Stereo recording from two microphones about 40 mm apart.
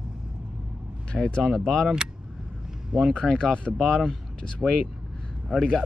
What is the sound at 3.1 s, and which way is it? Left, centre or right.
Speech, centre.